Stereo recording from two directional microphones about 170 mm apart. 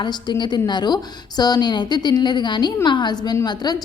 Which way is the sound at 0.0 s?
25° left (ahead or behind).